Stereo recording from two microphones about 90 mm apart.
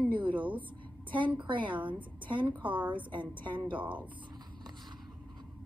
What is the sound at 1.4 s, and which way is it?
A woman's voice, 65° right (ahead or behind).